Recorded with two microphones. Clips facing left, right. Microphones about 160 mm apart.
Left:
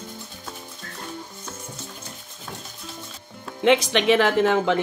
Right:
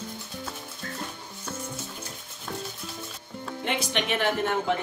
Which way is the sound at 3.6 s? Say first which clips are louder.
Left 11 dB; 90° left.